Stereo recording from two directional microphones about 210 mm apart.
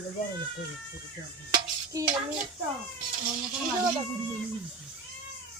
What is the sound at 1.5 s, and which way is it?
Dishes, 15° right (ahead or behind).